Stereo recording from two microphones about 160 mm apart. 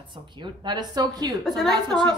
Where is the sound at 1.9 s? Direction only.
5° left (ahead or behind).